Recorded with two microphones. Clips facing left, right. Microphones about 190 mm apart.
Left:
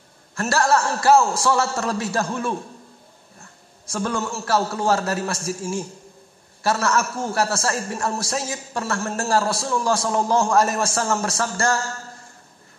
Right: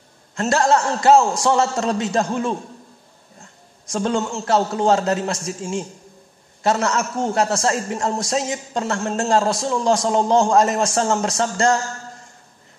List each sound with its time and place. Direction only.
0.4 s a man's voice: 20° right (ahead or behind)
3.9 s a man's voice: 25° right (ahead or behind)